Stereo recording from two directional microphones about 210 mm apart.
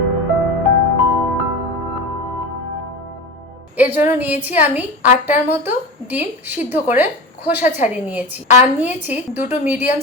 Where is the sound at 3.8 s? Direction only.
10° right (ahead or behind).